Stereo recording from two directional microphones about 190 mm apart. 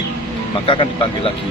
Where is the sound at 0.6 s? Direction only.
30° left (ahead or behind).